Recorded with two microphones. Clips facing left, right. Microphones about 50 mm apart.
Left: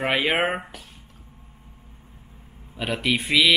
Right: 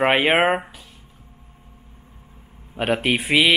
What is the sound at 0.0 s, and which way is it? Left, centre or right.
Speech, right.